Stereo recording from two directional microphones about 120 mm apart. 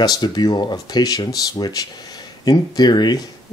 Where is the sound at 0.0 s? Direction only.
35° left (ahead or behind).